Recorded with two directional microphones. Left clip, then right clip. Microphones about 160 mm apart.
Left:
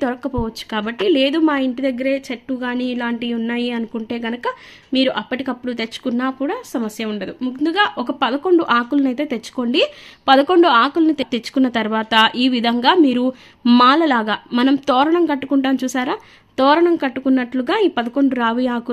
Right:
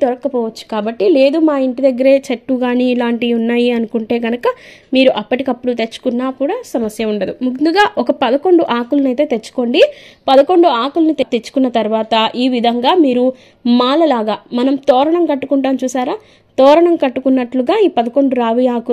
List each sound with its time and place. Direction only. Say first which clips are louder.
0.0 s speech: right 7 dB; 5° right (ahead or behind)
2.0 s a woman's voice: right 10 dB; 30° right (ahead or behind)
4.9 s a woman's voice: right 7 dB; 20° right (ahead or behind)
7.0 s a woman's voice: right 8 dB; 25° right (ahead or behind)
7.6 s a woman's voice: right 6 dB; 35° right (ahead or behind)
8.5 s a woman's voice: even; 15° right (ahead or behind)
10.2 s a woman's voice: right 4 dB; 5° left (ahead or behind)